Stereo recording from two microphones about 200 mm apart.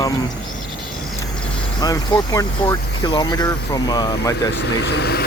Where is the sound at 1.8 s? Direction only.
15° left (ahead or behind).